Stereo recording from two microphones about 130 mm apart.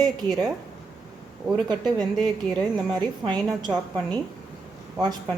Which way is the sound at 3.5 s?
30° right (ahead or behind).